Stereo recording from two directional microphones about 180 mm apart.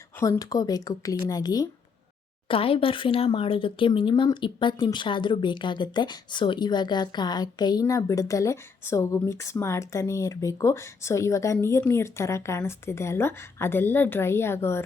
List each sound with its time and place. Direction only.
0.2 s a woman's voice: 20° left (ahead or behind)